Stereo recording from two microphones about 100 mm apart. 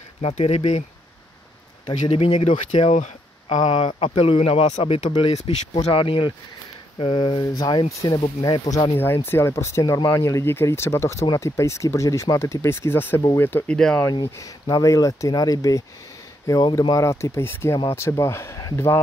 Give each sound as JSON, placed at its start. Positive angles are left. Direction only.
{"t": 0.2, "sound": "speech", "side_deg": 75}
{"t": 1.9, "sound": "speech", "side_deg": 70}
{"t": 3.5, "sound": "speech", "side_deg": 50}
{"t": 5.2, "sound": "speech", "side_deg": 85}
{"t": 7.4, "sound": "speech", "side_deg": 40}
{"t": 8.9, "sound": "speech", "side_deg": 25}
{"t": 13.7, "sound": "speech", "side_deg": 5}
{"t": 14.2, "sound": "speech", "side_deg": 30}
{"t": 16.9, "sound": "speech", "side_deg": 30}